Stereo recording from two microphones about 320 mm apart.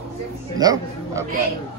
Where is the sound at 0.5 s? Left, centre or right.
Centre.